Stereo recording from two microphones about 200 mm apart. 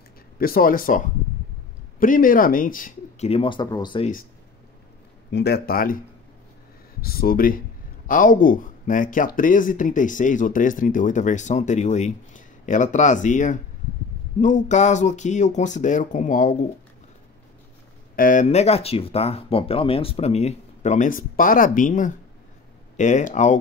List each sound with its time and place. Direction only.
0.4 s speech: 45° left (ahead or behind)
3.3 s speech: 25° left (ahead or behind)
5.3 s speech: 55° left (ahead or behind)
7.0 s speech: 50° left (ahead or behind)
18.1 s speech: 40° left (ahead or behind)